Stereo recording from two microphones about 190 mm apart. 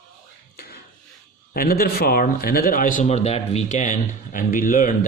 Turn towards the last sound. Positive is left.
turn(degrees=45)  # may be behind; listen again after turning